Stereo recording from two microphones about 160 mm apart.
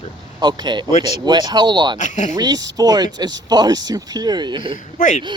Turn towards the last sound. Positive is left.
turn(degrees=55)  # may be behind; listen again after turning